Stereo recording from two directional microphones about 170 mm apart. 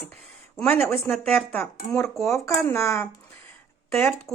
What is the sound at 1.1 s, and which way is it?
Speech, centre (ahead or behind).